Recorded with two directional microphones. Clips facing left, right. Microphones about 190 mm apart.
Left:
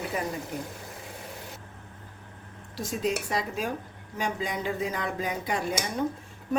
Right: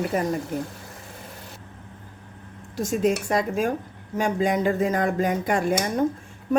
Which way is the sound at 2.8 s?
50° right (ahead or behind).